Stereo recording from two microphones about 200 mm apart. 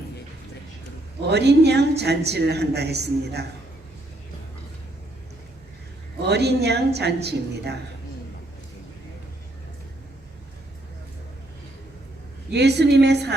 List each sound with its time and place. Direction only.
1.3 s a woman's voice: 55° right (ahead or behind)
6.2 s a woman's voice: 55° right (ahead or behind)
12.5 s a woman's voice: 55° right (ahead or behind)